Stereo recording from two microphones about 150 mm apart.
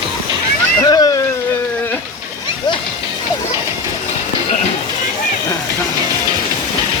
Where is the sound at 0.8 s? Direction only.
25° left (ahead or behind).